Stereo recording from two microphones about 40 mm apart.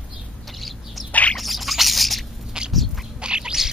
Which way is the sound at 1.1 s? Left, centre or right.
Left.